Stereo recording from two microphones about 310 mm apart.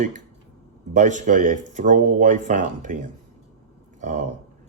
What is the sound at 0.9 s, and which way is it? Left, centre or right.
Speech, right.